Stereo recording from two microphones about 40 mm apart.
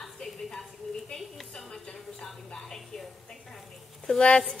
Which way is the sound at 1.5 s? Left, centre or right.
Centre.